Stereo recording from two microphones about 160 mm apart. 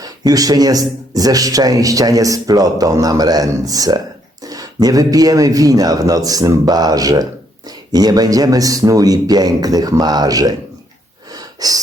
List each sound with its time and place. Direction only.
0.0 s a man's voice: 25° right (ahead or behind)
11.3 s wheeze: 25° right (ahead or behind)